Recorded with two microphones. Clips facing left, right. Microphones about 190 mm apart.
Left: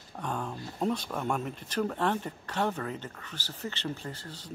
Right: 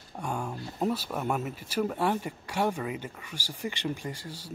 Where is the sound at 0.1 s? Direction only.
10° right (ahead or behind).